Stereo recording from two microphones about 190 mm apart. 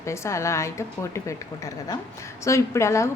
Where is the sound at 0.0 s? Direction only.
15° left (ahead or behind).